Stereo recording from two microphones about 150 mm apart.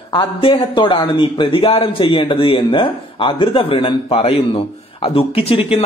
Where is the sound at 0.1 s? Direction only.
35° left (ahead or behind).